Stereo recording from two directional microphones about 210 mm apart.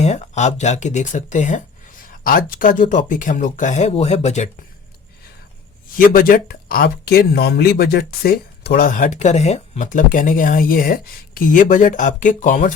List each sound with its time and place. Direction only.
0.0 s speech: 30° left (ahead or behind)
6.0 s speech: 40° left (ahead or behind)